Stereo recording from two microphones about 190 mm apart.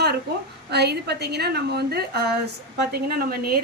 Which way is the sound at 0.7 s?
60° right (ahead or behind).